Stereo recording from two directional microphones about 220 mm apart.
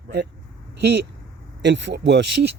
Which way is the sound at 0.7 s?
50° right (ahead or behind).